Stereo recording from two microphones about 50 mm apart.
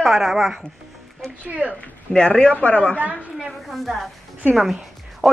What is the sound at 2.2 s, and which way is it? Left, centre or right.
Speech, centre.